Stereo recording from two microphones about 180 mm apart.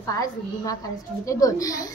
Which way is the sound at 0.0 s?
20° left (ahead or behind).